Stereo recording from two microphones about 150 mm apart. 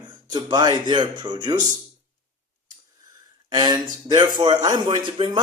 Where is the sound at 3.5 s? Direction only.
25° right (ahead or behind).